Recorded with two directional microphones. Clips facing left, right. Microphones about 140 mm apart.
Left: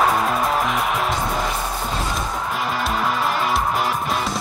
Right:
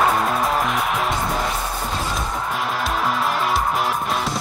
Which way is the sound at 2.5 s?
Centre (ahead or behind).